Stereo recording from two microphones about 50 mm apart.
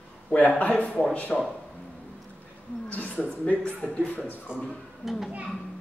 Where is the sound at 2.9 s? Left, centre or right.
Left.